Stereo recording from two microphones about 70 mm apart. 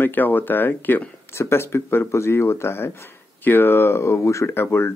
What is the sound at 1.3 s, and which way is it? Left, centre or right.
Speech, left.